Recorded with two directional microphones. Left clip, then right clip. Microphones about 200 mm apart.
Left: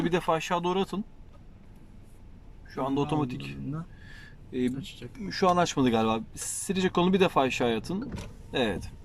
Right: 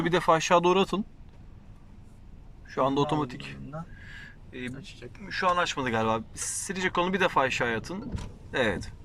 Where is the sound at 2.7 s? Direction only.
5° left (ahead or behind).